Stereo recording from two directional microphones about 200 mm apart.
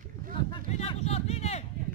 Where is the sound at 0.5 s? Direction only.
30° left (ahead or behind).